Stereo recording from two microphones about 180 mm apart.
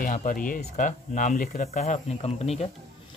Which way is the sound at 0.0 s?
50° left (ahead or behind).